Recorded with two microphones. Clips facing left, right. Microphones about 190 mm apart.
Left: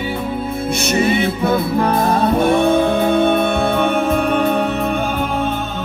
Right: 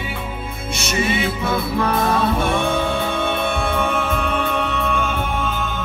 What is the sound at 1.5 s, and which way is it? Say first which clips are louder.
Music: left 3 dB; 35° left (ahead or behind).